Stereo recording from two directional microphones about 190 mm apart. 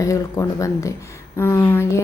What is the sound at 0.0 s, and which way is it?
A woman's voice, 15° left (ahead or behind).